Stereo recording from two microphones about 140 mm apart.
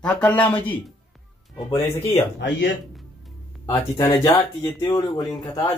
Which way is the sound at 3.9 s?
25° left (ahead or behind).